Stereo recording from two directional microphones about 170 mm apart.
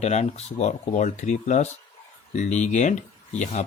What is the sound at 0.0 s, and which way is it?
Speech, 40° left (ahead or behind).